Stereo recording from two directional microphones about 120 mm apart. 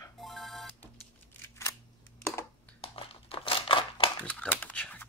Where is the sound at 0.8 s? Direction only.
20° left (ahead or behind).